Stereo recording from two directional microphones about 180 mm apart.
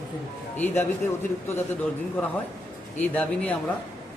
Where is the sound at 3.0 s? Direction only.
10° left (ahead or behind).